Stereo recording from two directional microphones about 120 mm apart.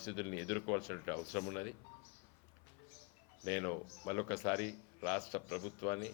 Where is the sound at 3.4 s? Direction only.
20° left (ahead or behind).